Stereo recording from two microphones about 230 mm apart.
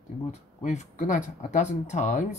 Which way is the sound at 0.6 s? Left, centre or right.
Left.